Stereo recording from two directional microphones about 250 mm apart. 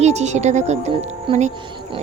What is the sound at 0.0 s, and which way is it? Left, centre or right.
Speech, right.